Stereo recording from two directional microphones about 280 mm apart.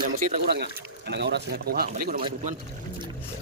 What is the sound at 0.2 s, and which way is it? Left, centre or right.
Speech, right.